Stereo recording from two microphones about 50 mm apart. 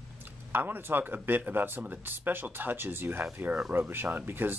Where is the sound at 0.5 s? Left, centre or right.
Right.